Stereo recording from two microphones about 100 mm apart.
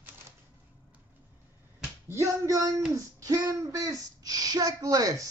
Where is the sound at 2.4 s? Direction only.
35° right (ahead or behind).